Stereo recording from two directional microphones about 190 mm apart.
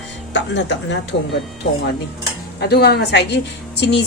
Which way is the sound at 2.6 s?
55° left (ahead or behind).